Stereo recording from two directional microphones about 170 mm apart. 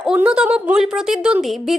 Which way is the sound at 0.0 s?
5° right (ahead or behind).